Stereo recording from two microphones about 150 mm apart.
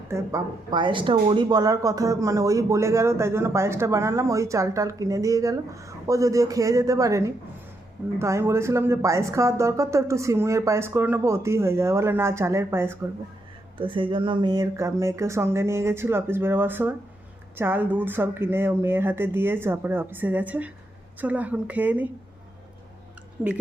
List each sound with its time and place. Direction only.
0.1 s speech: 20° right (ahead or behind)
13.7 s speech: 35° right (ahead or behind); by 22.1 s 10° right (ahead or behind)
23.4 s speech: 5° right (ahead or behind)